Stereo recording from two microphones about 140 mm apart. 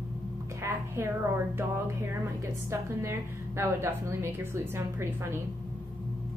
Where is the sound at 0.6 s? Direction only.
15° right (ahead or behind).